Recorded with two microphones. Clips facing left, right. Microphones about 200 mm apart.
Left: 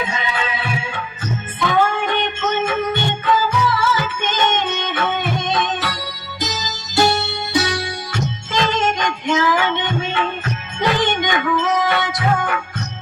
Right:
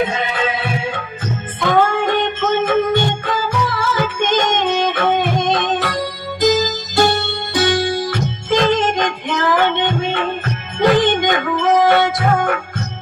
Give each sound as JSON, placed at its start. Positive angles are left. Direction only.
{"t": 0.0, "sound": "music", "side_deg": -55}